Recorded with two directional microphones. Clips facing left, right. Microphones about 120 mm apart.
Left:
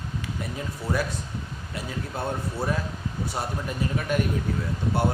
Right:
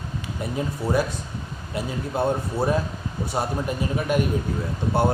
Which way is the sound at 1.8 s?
20° right (ahead or behind).